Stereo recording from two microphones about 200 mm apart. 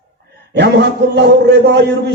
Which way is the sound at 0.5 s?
60° right (ahead or behind).